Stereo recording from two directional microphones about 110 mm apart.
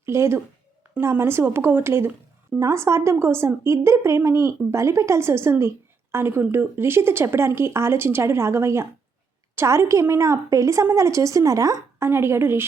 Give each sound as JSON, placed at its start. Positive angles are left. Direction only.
{"t": 0.0, "sound": "a woman's voice", "side_deg": -25}